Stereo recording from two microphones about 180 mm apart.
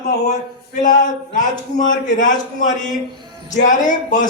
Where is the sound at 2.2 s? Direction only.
45° left (ahead or behind).